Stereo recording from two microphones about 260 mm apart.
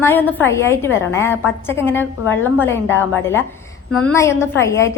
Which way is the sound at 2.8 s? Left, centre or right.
Left.